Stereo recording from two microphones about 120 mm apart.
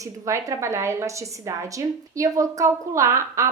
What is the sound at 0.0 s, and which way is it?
A woman's voice, 25° right (ahead or behind).